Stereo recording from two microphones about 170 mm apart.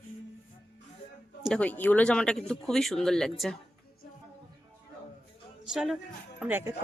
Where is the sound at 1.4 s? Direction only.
5° left (ahead or behind).